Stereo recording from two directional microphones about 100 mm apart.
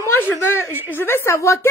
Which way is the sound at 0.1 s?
25° left (ahead or behind).